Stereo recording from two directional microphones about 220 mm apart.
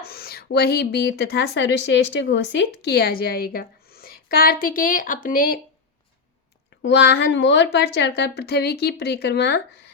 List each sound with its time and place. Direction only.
0.0 s speech: 45° left (ahead or behind)
6.8 s speech: 50° left (ahead or behind)